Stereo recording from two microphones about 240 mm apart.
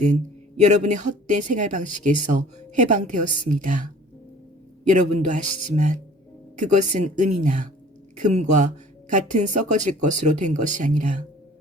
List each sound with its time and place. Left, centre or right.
0.0 s speech: right
4.9 s speech: right